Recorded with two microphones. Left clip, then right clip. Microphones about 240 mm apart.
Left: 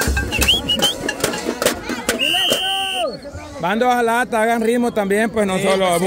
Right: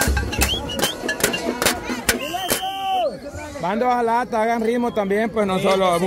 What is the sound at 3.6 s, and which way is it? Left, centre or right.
Speech, centre.